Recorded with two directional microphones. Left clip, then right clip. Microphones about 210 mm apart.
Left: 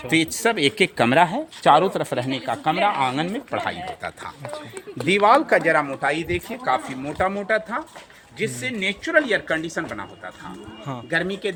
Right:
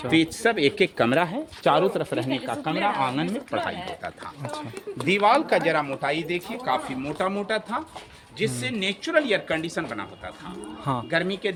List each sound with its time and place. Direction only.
0.1 s speech: 55° left (ahead or behind)
4.5 s speech: 20° right (ahead or behind)
5.2 s speech: 25° left (ahead or behind)
9.9 s speech: 20° left (ahead or behind)
11.1 s speech: 35° left (ahead or behind)